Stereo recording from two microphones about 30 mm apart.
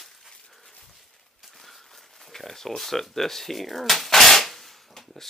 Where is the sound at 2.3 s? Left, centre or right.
Centre.